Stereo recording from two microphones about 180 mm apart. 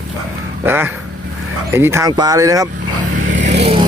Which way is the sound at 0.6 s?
10° right (ahead or behind).